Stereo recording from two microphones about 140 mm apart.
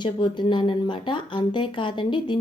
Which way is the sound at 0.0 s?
35° left (ahead or behind).